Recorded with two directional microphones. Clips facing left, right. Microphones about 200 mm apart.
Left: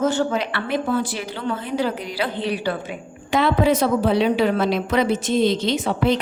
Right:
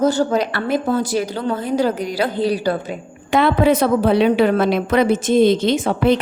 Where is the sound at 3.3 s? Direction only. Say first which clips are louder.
Right 3 dB; 55° right (ahead or behind).